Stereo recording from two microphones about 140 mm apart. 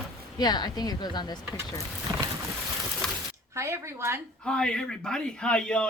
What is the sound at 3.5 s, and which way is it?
Speech, 20° right (ahead or behind).